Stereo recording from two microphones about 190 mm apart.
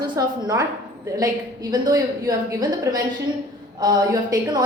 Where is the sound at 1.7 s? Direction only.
20° right (ahead or behind).